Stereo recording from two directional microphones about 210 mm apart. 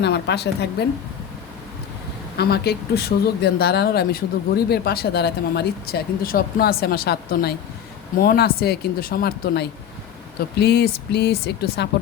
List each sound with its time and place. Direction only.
0.0 s speech: 50° left (ahead or behind)
2.4 s speech: 50° left (ahead or behind)